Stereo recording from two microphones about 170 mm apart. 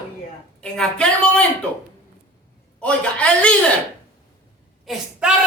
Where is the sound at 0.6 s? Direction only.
5° left (ahead or behind).